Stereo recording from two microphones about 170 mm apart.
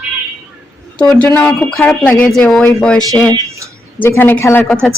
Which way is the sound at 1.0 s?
10° left (ahead or behind).